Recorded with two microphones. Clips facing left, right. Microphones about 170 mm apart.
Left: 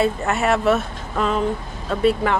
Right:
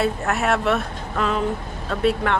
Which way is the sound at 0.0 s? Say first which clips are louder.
Left 2 dB; centre (ahead or behind).